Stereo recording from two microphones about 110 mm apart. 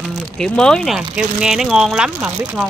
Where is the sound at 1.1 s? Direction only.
5° right (ahead or behind).